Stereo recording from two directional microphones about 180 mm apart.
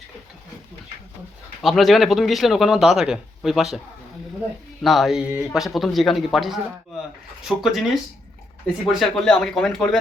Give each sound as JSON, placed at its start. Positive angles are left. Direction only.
{"t": 1.6, "sound": "speech", "side_deg": 0}
{"t": 4.8, "sound": "speech", "side_deg": 0}
{"t": 8.9, "sound": "speech", "side_deg": 0}